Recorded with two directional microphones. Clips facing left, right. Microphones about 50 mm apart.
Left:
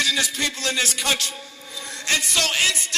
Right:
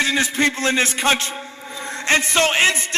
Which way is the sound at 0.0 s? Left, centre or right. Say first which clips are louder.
Right 5 dB; right.